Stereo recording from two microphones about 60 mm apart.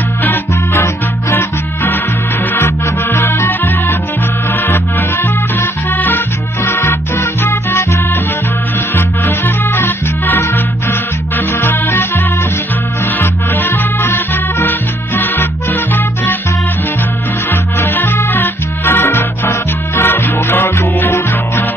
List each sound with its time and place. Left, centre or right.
0.2 s music: left
7.2 s music: left
8.9 s music: left
13.2 s music: left
17.5 s music: left